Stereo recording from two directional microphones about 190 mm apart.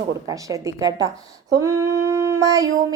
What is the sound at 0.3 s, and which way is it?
A woman's voice, 15° right (ahead or behind).